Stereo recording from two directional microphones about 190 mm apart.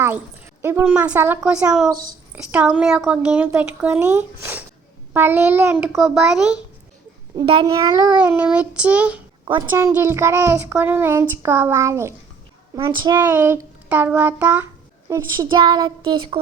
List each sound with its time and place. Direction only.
0.6 s a child's voice: 10° right (ahead or behind)
7.3 s a child's voice: 25° right (ahead or behind)
8.3 s a child's voice: 10° right (ahead or behind)
15.1 s a child's voice: 20° right (ahead or behind)